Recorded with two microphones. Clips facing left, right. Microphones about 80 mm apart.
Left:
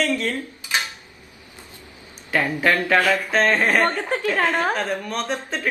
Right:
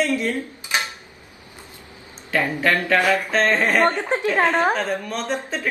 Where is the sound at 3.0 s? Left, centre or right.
Right.